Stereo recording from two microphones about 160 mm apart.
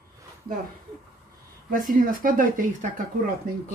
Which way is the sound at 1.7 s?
60° right (ahead or behind).